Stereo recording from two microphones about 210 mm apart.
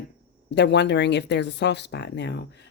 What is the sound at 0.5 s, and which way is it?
Speech, 55° left (ahead or behind).